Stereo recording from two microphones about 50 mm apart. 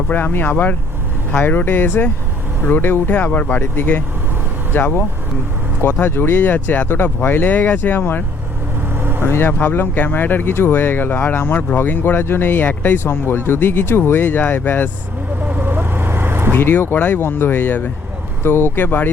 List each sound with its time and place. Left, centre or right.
0.1 s speech: left
3.1 s speech: left
5.8 s speech: left
6.4 s speech: left
6.8 s speech: left
9.0 s vehicle: right
9.2 s speech: left
13.0 s speech: left
15.4 s vehicle: right
16.5 s speech: left
17.2 s speech: left
18.4 s speech: left